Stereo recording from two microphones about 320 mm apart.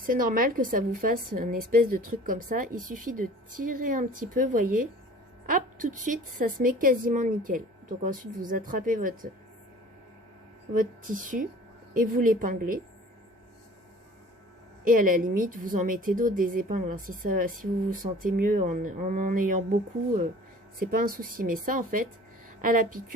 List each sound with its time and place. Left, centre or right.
0.0 s a woman's voice: right
10.8 s a woman's voice: right
14.8 s a woman's voice: right
20.7 s a woman's voice: right